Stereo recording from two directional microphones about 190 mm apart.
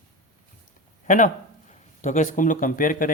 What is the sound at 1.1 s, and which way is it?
Speech, 45° left (ahead or behind).